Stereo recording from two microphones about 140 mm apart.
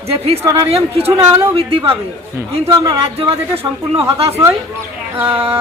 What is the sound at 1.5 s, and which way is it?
Speech, 40° right (ahead or behind).